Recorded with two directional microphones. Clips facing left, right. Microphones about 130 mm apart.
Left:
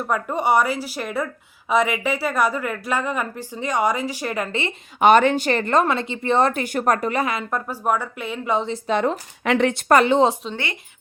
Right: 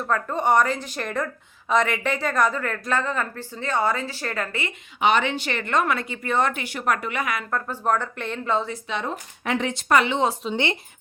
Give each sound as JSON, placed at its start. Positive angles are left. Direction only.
{"t": 0.0, "sound": "a woman's voice", "side_deg": 10}
{"t": 4.9, "sound": "speech", "side_deg": 50}
{"t": 7.5, "sound": "a woman's voice", "side_deg": 10}
{"t": 9.4, "sound": "speech", "side_deg": 80}
{"t": 9.9, "sound": "speech", "side_deg": 45}
{"t": 10.5, "sound": "speech", "side_deg": -25}